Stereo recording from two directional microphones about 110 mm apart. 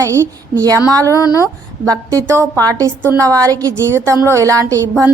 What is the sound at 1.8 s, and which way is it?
A woman's voice, 30° right (ahead or behind).